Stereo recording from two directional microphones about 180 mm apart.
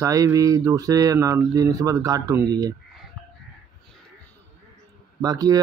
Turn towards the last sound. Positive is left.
turn(degrees=-20)  # may be behind; listen again after turning